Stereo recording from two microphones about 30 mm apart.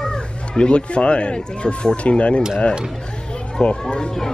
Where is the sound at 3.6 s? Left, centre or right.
Left.